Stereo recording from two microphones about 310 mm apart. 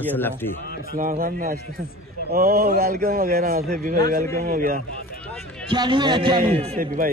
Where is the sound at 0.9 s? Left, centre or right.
Right.